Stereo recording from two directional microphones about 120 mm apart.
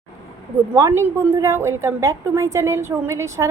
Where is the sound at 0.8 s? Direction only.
20° right (ahead or behind).